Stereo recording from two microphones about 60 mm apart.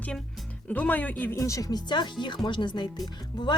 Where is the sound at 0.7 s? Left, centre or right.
Left.